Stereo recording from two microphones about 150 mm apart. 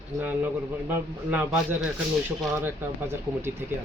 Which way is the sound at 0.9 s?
15° right (ahead or behind).